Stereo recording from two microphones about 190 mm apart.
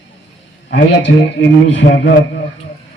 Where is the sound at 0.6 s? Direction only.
70° left (ahead or behind).